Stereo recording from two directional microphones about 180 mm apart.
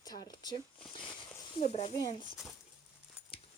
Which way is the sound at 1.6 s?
35° left (ahead or behind).